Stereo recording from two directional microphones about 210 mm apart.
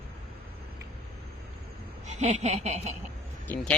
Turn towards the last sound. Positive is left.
turn(degrees=10)  # may be behind; listen again after turning